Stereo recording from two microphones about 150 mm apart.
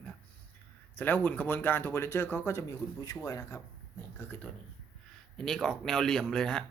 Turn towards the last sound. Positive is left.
turn(degrees=5)  # may be behind; listen again after turning